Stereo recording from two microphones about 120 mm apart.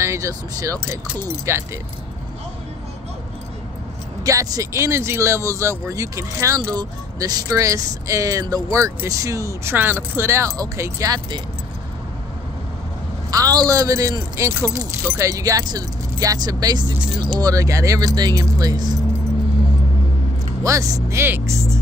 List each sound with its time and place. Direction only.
0.0 s speech: 25° right (ahead or behind)
4.2 s speech: 30° right (ahead or behind)
9.8 s speech: 15° right (ahead or behind)
13.3 s speech: 30° right (ahead or behind)
20.6 s speech: 25° right (ahead or behind)